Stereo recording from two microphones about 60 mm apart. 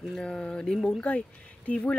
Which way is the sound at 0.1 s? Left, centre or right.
Centre.